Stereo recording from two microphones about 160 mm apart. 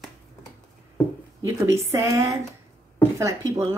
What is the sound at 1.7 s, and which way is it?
A woman's voice, 20° right (ahead or behind).